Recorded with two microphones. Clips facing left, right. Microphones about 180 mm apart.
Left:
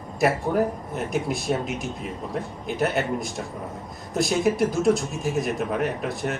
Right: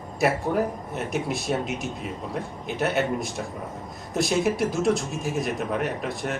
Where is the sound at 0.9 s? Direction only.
Centre (ahead or behind).